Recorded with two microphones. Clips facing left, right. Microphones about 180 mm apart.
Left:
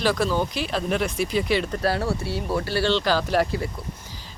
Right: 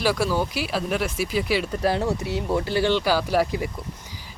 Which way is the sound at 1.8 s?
20° right (ahead or behind).